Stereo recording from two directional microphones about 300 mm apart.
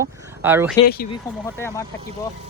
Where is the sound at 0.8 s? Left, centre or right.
Left.